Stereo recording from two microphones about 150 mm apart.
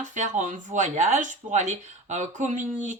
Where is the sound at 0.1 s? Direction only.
55° right (ahead or behind).